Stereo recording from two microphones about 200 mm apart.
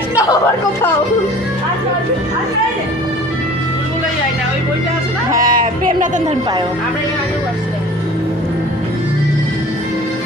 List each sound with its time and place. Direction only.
5.4 s speech: 45° right (ahead or behind)